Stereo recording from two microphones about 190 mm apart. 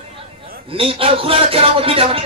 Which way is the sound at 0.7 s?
30° right (ahead or behind).